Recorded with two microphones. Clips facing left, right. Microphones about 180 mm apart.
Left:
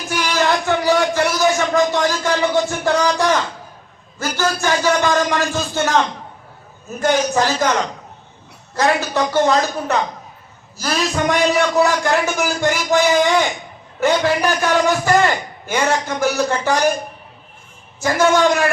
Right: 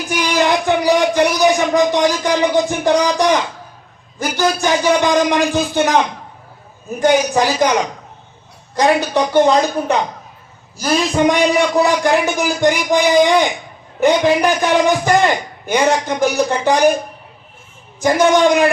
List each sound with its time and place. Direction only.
0.1 s a man's voice: 15° right (ahead or behind)
18.0 s a man's voice: 15° right (ahead or behind)